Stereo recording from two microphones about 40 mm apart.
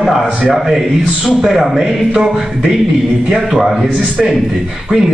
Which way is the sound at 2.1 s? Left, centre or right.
Right.